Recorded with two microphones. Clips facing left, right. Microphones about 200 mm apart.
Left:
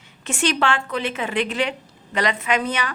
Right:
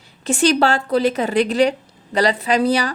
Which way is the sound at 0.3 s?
35° right (ahead or behind).